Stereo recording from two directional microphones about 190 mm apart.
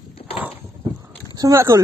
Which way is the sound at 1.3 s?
15° right (ahead or behind).